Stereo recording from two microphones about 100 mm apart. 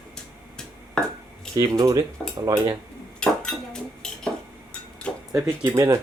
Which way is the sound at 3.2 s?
5° left (ahead or behind).